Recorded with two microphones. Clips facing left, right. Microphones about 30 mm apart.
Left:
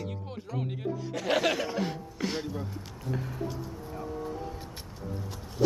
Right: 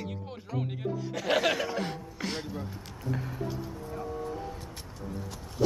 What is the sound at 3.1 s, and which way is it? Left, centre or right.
Music, centre.